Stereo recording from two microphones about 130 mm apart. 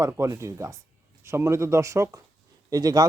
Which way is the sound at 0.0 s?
25° right (ahead or behind).